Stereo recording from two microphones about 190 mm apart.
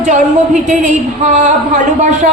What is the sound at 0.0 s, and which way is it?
A man's voice, 40° right (ahead or behind).